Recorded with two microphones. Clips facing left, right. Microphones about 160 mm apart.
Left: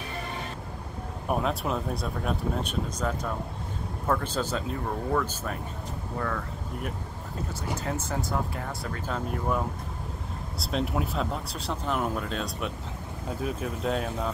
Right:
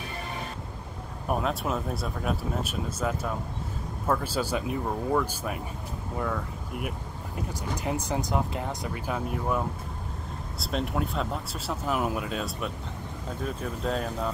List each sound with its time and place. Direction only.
1.2 s speech: centre (ahead or behind)